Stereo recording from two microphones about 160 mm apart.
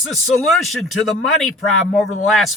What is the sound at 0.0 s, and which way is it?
Speech, centre (ahead or behind).